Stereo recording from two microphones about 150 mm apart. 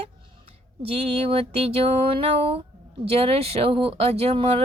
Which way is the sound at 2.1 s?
40° right (ahead or behind).